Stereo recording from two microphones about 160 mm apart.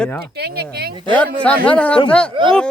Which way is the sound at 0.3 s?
90° right.